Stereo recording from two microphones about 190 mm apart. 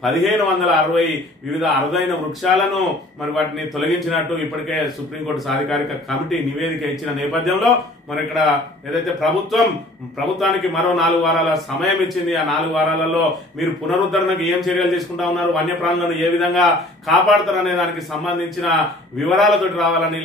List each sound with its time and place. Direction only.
0.0 s a man's voice: centre (ahead or behind)